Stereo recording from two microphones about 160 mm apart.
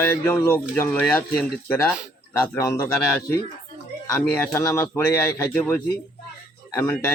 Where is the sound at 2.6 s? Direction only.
20° left (ahead or behind).